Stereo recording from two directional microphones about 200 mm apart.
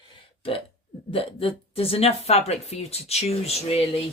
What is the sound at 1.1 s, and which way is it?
Speech, 30° left (ahead or behind).